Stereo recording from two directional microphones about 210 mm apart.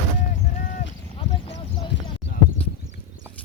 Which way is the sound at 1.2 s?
25° left (ahead or behind).